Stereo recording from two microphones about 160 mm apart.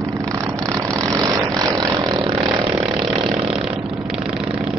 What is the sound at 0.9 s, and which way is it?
Vehicle, 20° right (ahead or behind).